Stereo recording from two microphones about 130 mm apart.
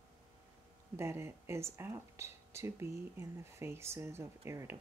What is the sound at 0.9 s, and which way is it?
Speech, 20° right (ahead or behind).